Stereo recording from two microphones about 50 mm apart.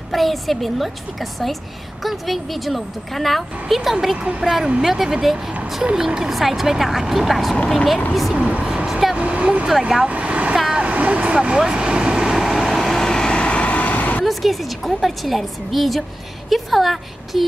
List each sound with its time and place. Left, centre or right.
0.1 s a woman's voice: centre
2.0 s a woman's voice: centre
8.8 s vehicle: centre
9.1 s vehicle: right
9.7 s speech: centre
10.0 s vehicle: right; by 14.2 s left
14.2 s a woman's voice: centre